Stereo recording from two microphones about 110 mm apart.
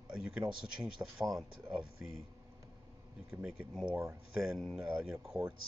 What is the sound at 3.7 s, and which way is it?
Speech, 10° right (ahead or behind).